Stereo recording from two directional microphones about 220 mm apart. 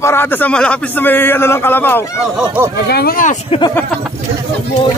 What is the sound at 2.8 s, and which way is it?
Speech, 45° left (ahead or behind).